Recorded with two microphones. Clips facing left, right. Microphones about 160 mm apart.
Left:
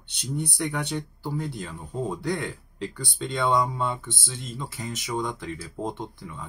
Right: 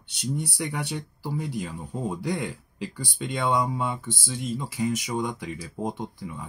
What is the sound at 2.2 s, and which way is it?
Speech, 10° right (ahead or behind).